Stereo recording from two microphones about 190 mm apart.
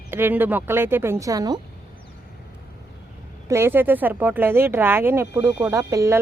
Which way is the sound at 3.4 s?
15° right (ahead or behind).